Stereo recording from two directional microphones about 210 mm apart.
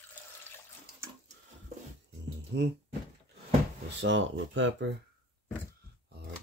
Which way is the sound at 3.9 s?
60° right (ahead or behind).